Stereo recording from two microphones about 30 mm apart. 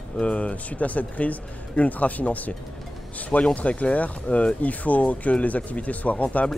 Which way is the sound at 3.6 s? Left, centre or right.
Left.